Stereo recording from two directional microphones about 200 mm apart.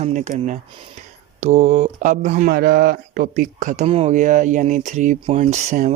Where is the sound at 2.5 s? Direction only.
50° right (ahead or behind).